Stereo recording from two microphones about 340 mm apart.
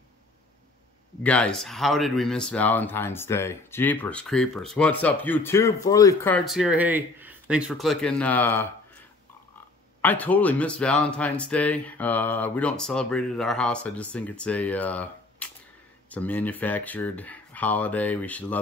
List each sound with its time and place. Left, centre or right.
1.2 s speech: centre
10.0 s speech: centre